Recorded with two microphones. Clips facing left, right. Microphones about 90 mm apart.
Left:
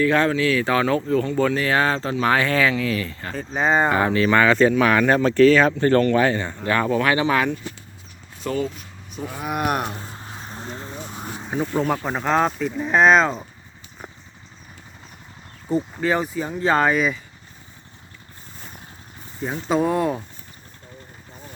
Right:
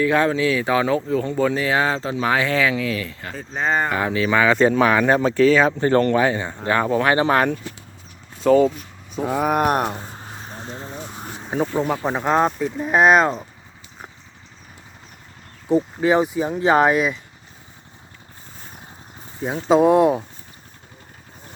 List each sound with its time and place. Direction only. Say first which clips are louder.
0.0 s speech: right 1 dB; 15° right (ahead or behind)
3.6 s speech: left 2 dB; 15° left (ahead or behind)
3.9 s speech: left 2 dB; centre (ahead or behind)
4.9 s speech: even; 15° right (ahead or behind); by 7.6 s 45° right (ahead or behind)
8.4 s speech: right 11 dB; 90° right
9.4 s a sound: right 4 dB; 45° right (ahead or behind)
9.9 s speech: right 2 dB; 15° right (ahead or behind)
12.0 s speech: right 2 dB; 15° right (ahead or behind)
15.7 s speech: right 4 dB; 15° right (ahead or behind)
19.4 s speech: right 5 dB; 15° right (ahead or behind)